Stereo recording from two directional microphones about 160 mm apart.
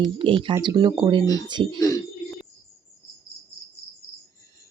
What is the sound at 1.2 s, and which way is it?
Speech, 25° left (ahead or behind).